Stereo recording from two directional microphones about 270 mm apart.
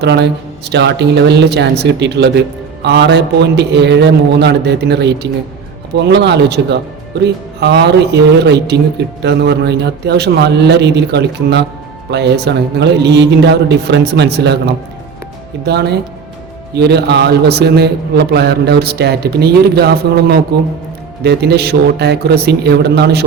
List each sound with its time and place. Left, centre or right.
0.0 s a man's voice: right
15.6 s a man's voice: right